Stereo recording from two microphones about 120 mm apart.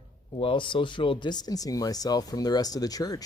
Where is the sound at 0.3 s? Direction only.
45° left (ahead or behind).